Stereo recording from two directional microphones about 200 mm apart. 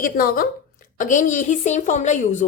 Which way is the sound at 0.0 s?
45° left (ahead or behind).